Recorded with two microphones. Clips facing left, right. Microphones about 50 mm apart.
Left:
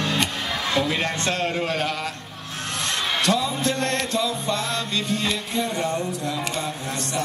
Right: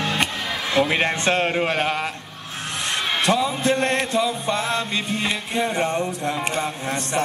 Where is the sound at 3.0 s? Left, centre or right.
Right.